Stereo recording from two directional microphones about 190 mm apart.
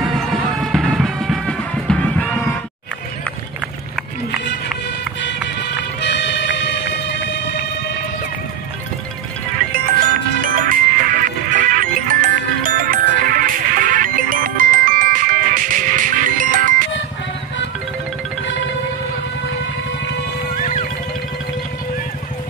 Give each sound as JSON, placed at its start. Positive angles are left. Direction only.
{"t": 0.2, "sound": "music", "side_deg": 0}
{"t": 5.2, "sound": "music", "side_deg": 65}
{"t": 10.4, "sound": "music", "side_deg": -45}